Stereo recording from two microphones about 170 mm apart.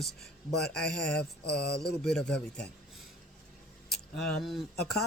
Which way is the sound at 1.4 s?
75° left (ahead or behind).